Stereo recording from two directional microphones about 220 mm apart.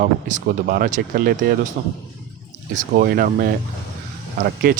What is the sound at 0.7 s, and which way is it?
Speech, 40° right (ahead or behind).